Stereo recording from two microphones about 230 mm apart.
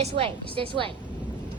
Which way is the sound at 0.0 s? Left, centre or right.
Right.